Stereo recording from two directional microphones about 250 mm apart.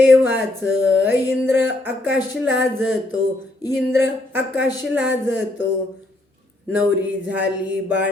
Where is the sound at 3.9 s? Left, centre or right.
Centre.